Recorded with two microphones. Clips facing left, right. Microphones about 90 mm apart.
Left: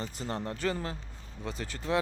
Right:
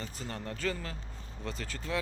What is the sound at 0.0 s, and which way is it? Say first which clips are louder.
Speech: left 5 dB; 25° left (ahead or behind).